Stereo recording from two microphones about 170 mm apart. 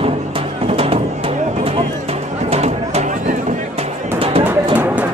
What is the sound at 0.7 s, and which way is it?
Music, 35° right (ahead or behind).